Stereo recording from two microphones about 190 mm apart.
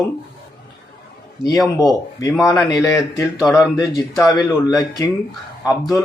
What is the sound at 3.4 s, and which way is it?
Speech, centre (ahead or behind).